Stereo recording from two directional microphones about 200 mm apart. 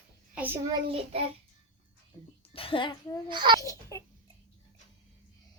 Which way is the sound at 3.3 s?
25° right (ahead or behind).